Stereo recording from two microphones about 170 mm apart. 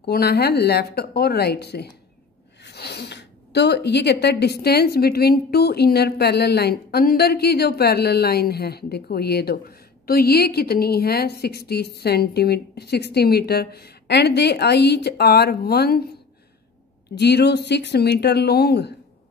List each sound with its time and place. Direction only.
0.0 s a woman's voice: 70° left (ahead or behind)
17.1 s a woman's voice: 75° left (ahead or behind)